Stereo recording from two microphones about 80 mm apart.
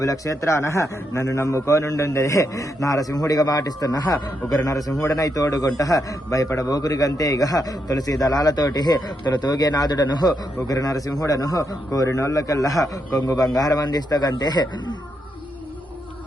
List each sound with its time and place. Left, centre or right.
0.0 s a man's voice: left